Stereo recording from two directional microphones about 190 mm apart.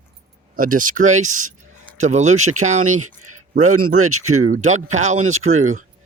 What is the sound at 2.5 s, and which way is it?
Speech, 90° right.